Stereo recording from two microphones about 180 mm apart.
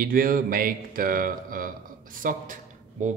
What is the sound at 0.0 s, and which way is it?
Speech, 50° right (ahead or behind).